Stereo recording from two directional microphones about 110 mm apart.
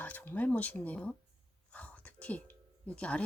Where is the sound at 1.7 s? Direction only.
10° left (ahead or behind).